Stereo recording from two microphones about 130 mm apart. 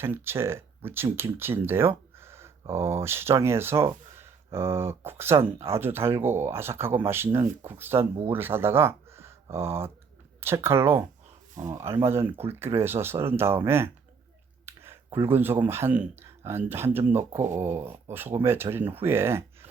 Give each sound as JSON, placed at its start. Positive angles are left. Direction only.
{"t": 0.0, "sound": "speech", "side_deg": -20}